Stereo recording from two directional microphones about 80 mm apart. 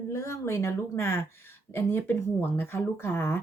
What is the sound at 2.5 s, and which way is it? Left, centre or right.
Speech, left.